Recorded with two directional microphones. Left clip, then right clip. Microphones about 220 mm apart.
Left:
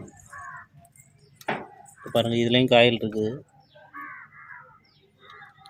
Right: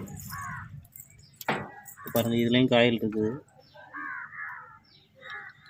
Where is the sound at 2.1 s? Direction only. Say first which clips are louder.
Left 4 dB; 20° left (ahead or behind).